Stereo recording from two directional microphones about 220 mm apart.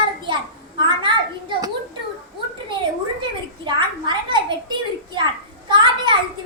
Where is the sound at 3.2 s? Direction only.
20° right (ahead or behind).